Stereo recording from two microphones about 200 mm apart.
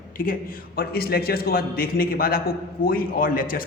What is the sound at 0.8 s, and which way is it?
A man's voice, 50° left (ahead or behind).